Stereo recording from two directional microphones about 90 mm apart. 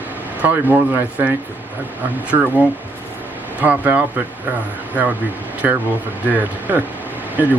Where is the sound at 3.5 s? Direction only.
20° right (ahead or behind).